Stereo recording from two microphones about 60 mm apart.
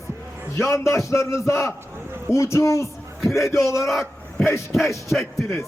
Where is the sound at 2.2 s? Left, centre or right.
Left.